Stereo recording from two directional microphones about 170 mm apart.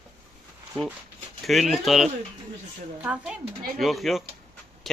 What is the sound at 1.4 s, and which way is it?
A woman's voice, centre (ahead or behind).